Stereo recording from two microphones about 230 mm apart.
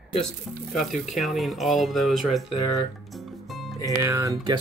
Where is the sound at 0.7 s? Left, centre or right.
Centre.